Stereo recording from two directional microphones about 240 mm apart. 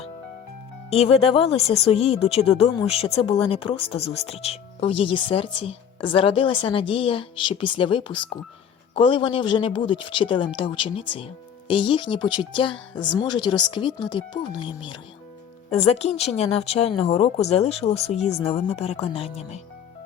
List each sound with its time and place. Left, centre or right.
0.9 s speech: left
15.7 s speech: left